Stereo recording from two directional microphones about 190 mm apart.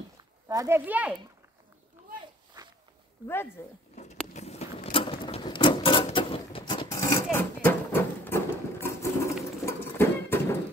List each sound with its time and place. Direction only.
0.2 s speech: 20° right (ahead or behind)
3.6 s speech: 15° left (ahead or behind)
3.9 s a sound: 35° left (ahead or behind); by 10.4 s 15° left (ahead or behind)